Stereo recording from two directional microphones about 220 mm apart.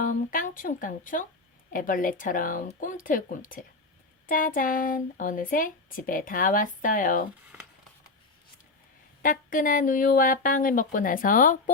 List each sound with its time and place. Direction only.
0.0 s speech: 40° left (ahead or behind)
9.2 s speech: 40° left (ahead or behind)